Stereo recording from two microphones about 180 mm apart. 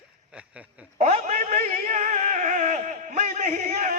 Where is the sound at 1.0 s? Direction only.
40° right (ahead or behind).